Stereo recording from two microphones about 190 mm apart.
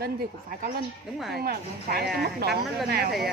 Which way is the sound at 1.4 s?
55° right (ahead or behind).